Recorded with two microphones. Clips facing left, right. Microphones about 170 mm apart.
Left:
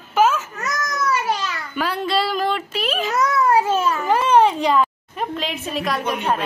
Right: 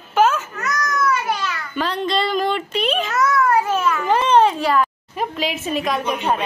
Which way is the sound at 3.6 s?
30° left (ahead or behind).